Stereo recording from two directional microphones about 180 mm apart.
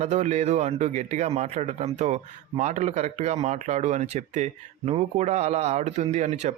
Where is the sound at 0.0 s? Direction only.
40° right (ahead or behind).